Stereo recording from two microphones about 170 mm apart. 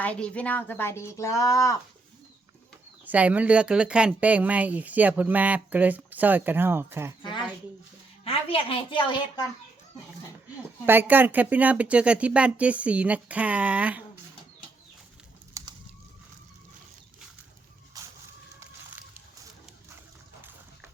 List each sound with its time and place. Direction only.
0.0 s speech: 5° left (ahead or behind)
3.0 s speech: 10° right (ahead or behind)
7.2 s a sound: 30° left (ahead or behind)
8.2 s a woman's voice: 35° left (ahead or behind)
10.8 s speech: 10° right (ahead or behind)
15.6 s bird: 20° right (ahead or behind)
18.0 s a sound: 20° right (ahead or behind)